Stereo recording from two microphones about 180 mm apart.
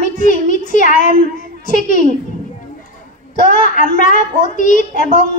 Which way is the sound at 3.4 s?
45° left (ahead or behind).